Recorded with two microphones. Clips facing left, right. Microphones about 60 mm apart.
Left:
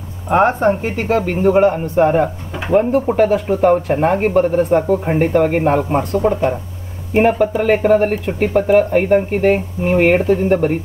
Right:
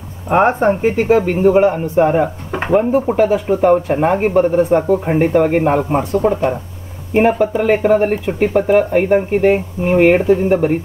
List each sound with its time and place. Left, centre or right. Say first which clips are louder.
0.3 s speech: right 1 dB; right
1.3 s speech: right 1 dB; centre